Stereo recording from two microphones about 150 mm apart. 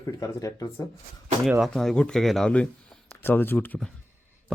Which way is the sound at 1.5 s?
5° right (ahead or behind).